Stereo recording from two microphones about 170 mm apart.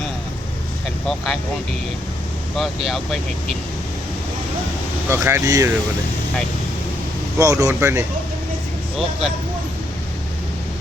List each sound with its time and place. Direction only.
1.0 s speech: centre (ahead or behind)
2.6 s speech: centre (ahead or behind)
5.0 s speech: 15° right (ahead or behind)
7.3 s speech: 20° right (ahead or behind)